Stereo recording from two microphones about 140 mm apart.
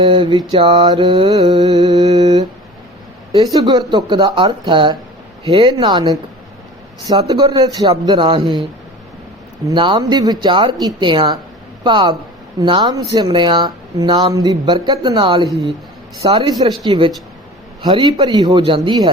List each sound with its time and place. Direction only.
0.0 s speech: 40° right (ahead or behind)
0.8 s speech: 30° right (ahead or behind)
9.7 s speech: 35° right (ahead or behind)
16.5 s speech: 25° right (ahead or behind)
16.8 s speech: 40° right (ahead or behind)